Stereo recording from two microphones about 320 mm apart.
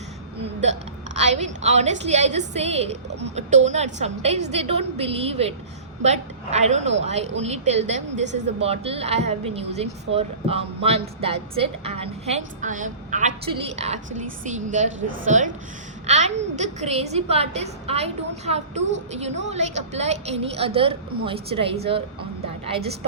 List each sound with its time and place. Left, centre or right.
0.6 s a woman's voice: right